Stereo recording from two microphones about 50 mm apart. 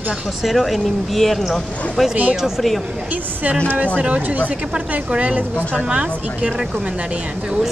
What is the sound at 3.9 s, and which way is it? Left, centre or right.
A woman's voice, right.